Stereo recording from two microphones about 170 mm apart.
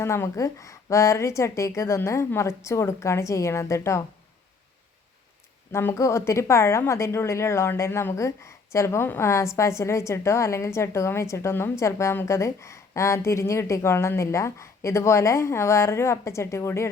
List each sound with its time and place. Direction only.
0.0 s a woman's voice: 15° left (ahead or behind)
5.7 s a woman's voice: 15° left (ahead or behind)